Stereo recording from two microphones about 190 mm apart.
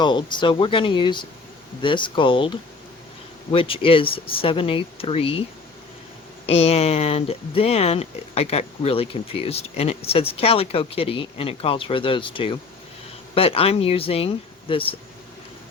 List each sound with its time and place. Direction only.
0.0 s speech: 25° left (ahead or behind)
6.4 s speech: 30° left (ahead or behind)